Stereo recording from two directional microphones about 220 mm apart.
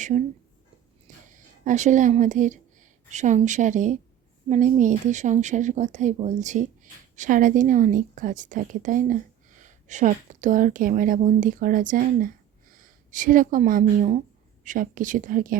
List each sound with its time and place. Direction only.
1.3 s a woman's voice: 35° right (ahead or behind)